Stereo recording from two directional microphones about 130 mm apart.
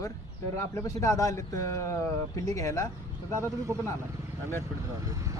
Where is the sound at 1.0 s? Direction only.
25° left (ahead or behind).